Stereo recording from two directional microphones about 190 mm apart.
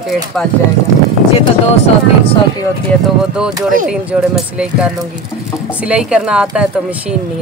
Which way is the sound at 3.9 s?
5° right (ahead or behind).